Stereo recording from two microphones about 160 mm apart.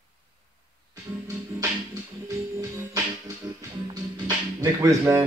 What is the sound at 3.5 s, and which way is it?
Speech, 25° right (ahead or behind).